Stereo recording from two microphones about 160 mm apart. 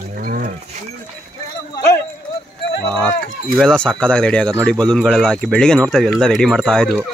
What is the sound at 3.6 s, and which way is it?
Speech, 5° left (ahead or behind).